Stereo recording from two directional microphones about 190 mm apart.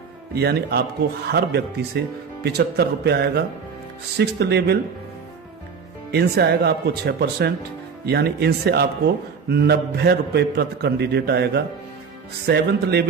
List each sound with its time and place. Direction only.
0.3 s a man's voice: 55° right (ahead or behind)
6.1 s a man's voice: 60° right (ahead or behind)